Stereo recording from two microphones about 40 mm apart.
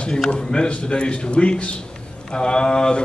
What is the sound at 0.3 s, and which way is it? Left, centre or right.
Speech, left.